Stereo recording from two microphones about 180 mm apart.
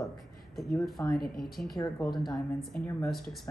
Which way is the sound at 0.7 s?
5° left (ahead or behind).